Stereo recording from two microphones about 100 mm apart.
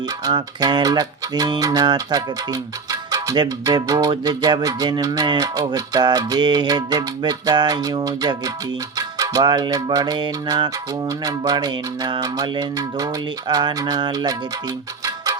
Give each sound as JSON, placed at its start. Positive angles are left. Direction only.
{"t": 0.3, "sound": "music", "side_deg": -45}